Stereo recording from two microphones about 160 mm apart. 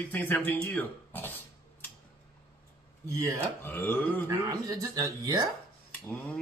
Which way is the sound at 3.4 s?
15° left (ahead or behind).